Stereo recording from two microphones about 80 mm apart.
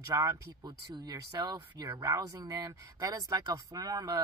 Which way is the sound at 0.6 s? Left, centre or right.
Right.